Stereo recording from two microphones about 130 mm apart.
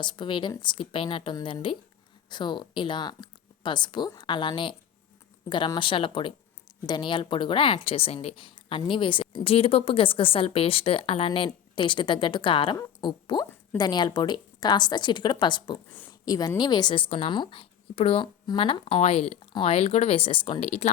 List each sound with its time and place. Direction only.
0.0 s speech: 35° left (ahead or behind)
16.0 s a sound: 30° left (ahead or behind)
16.6 s speech: 30° left (ahead or behind); by 20.9 s 50° left (ahead or behind)